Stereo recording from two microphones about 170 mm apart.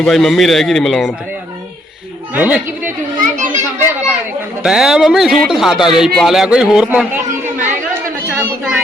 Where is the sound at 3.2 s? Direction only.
50° right (ahead or behind).